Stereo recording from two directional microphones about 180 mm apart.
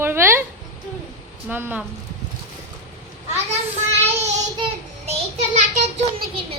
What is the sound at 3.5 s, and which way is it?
Child singing, 35° right (ahead or behind).